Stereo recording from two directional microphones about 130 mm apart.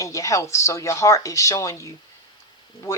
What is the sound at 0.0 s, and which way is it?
Speech, 25° left (ahead or behind).